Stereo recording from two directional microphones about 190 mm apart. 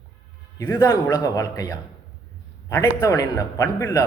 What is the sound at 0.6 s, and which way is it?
A man's voice, 15° left (ahead or behind).